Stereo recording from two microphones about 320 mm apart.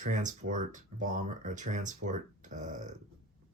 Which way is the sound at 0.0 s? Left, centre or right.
Right.